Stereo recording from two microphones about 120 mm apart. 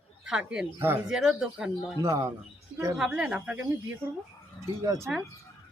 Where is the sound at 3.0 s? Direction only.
5° right (ahead or behind).